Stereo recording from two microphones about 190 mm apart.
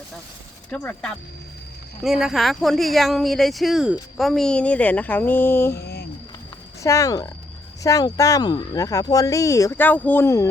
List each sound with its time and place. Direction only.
0.7 s speech: 5° left (ahead or behind)
5.8 s a sound: 55° left (ahead or behind)
6.8 s speech: 15° left (ahead or behind)